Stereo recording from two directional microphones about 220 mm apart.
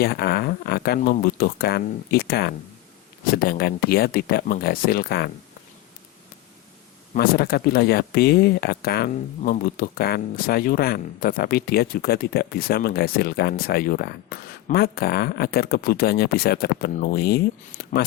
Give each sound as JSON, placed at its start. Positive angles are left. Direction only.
{"t": 0.0, "sound": "speech", "side_deg": 45}
{"t": 7.1, "sound": "speech", "side_deg": 45}
{"t": 17.8, "sound": "a sound", "side_deg": 45}